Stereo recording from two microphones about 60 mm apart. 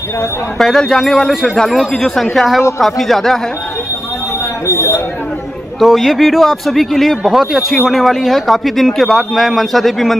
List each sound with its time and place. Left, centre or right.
0.6 s a man's voice: centre
4.6 s a sound: left
5.8 s a man's voice: centre